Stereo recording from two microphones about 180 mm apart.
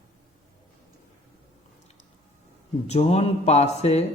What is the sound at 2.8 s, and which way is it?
Speech, 35° left (ahead or behind).